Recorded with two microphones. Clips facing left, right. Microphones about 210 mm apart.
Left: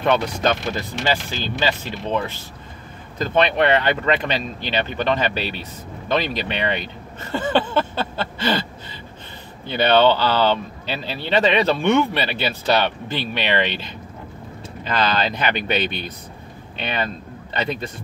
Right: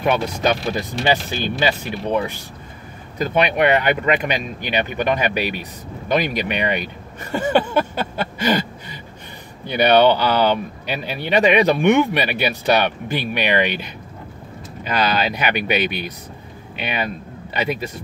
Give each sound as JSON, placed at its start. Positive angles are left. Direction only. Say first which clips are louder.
{"t": 0.0, "sound": "speech", "louder": "even", "side_deg": -10}
{"t": 9.7, "sound": "speech", "louder": "right 2 dB", "side_deg": -15}
{"t": 14.9, "sound": "speech", "louder": "right 1 dB", "side_deg": -10}